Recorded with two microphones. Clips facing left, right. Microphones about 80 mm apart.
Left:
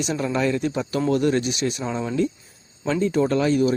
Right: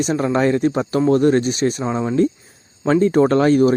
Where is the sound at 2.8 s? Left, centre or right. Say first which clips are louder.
Right 7 dB; right.